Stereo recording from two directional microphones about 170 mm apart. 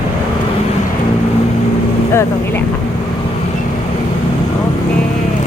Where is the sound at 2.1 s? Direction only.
15° left (ahead or behind).